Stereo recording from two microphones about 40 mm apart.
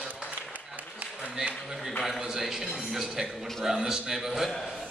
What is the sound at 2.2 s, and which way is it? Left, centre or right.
A man's voice, centre.